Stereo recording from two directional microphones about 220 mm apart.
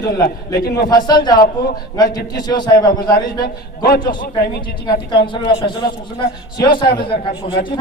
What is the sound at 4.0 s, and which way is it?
Speech, 20° left (ahead or behind).